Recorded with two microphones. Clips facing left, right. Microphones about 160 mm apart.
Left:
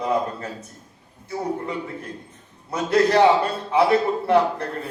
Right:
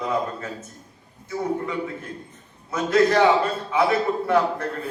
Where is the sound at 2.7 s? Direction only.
35° left (ahead or behind).